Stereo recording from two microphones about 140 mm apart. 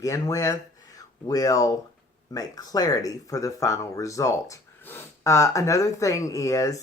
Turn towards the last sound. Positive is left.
turn(degrees=25)  # may be behind; listen again after turning